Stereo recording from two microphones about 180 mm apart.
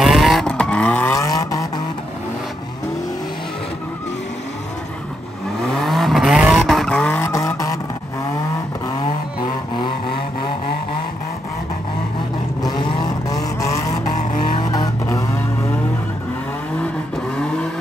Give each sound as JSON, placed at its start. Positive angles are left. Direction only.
{"t": 0.0, "sound": "vehicle", "side_deg": 0}
{"t": 5.9, "sound": "vehicle", "side_deg": 0}
{"t": 9.8, "sound": "vehicle", "side_deg": 25}
{"t": 13.3, "sound": "vehicle", "side_deg": 20}
{"t": 14.1, "sound": "vehicle", "side_deg": 45}
{"t": 14.7, "sound": "vehicle", "side_deg": 20}